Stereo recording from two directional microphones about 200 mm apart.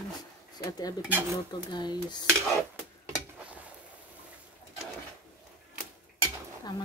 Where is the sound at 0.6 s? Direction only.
20° left (ahead or behind).